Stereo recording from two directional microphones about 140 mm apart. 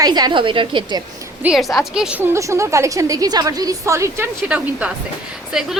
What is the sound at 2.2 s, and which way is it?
A woman's voice, 20° right (ahead or behind).